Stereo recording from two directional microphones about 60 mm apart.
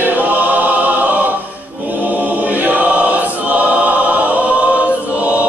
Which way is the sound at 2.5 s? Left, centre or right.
Right.